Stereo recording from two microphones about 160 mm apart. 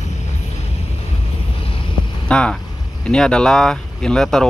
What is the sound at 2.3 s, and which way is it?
Speech, 5° left (ahead or behind).